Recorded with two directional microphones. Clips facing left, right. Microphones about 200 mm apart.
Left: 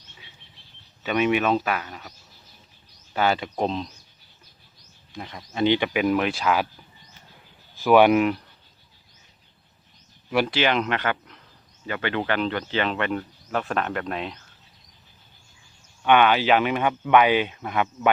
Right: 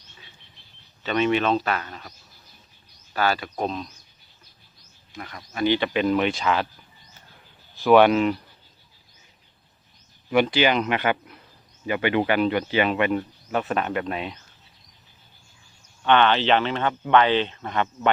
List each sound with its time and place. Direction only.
1.0 s speech: 10° left (ahead or behind)
3.1 s speech: 20° left (ahead or behind)
5.1 s speech: 20° left (ahead or behind); by 6.7 s 5° left (ahead or behind)
7.8 s speech: 10° left (ahead or behind)
10.2 s speech: centre (ahead or behind)
16.0 s speech: 10° left (ahead or behind)